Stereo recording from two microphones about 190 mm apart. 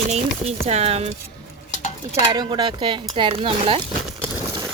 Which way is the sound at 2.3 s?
25° right (ahead or behind).